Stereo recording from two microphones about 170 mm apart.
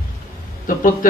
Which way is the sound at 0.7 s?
55° left (ahead or behind).